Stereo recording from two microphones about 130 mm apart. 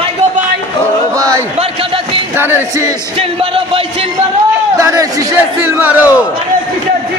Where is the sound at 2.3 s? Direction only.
15° right (ahead or behind).